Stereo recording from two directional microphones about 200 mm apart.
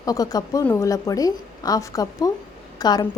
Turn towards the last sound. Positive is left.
turn(degrees=20)  # may be behind; listen again after turning